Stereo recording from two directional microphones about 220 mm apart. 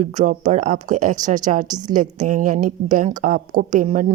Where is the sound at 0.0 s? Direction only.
35° right (ahead or behind).